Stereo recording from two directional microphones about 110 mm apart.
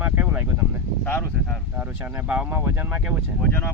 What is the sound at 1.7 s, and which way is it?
Speech, 10° right (ahead or behind).